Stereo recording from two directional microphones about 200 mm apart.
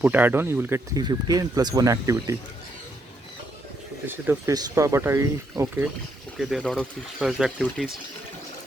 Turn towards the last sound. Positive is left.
turn(degrees=0)  # may be behind; listen again after turning